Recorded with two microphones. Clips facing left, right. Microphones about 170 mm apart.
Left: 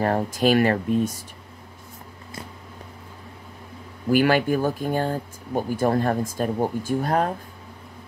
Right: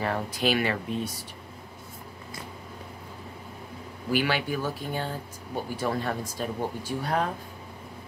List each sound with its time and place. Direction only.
0.0 s speech: 45° left (ahead or behind)
4.1 s speech: 45° left (ahead or behind)